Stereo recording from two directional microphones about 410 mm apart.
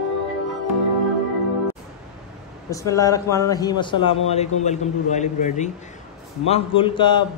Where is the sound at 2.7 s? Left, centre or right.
Centre.